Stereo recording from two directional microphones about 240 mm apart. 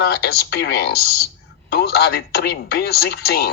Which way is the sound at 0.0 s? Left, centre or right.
Left.